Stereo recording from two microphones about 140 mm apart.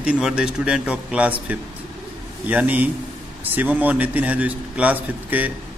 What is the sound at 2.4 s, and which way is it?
A man's voice, 10° right (ahead or behind).